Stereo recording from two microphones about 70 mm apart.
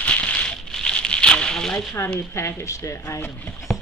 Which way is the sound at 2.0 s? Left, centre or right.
Left.